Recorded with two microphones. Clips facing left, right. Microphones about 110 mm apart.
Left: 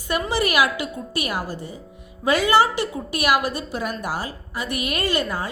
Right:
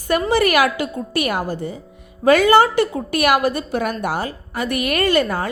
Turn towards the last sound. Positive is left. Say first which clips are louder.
# right 6 dB
turn(degrees=-55)  # may be behind; listen again after turning